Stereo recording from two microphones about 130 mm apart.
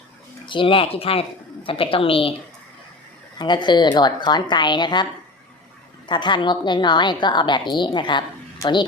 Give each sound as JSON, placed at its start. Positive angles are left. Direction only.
{"t": 0.4, "sound": "speech", "side_deg": 40}
{"t": 3.3, "sound": "a woman's voice", "side_deg": 35}
{"t": 6.1, "sound": "a woman's voice", "side_deg": 35}